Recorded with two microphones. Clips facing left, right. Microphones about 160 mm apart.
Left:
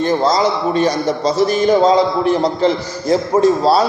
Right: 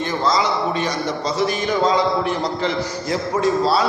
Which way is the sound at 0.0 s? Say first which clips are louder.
Left 6 dB; 35° left (ahead or behind).